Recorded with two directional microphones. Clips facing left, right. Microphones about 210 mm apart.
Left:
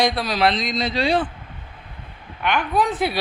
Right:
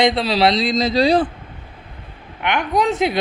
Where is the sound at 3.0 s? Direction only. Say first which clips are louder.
Right 4 dB; 20° right (ahead or behind).